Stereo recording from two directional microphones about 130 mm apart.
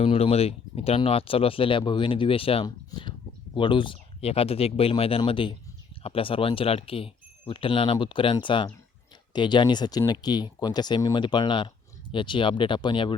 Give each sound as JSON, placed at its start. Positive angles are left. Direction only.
{"t": 0.0, "sound": "speech", "side_deg": 50}